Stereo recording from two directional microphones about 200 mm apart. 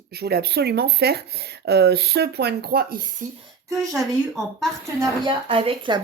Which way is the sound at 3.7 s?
Centre (ahead or behind).